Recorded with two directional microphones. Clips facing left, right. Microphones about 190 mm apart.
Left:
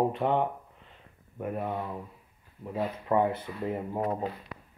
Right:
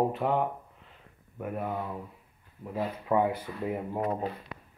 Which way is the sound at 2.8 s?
10° right (ahead or behind).